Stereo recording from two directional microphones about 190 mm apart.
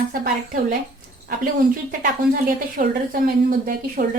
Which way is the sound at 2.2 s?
50° right (ahead or behind).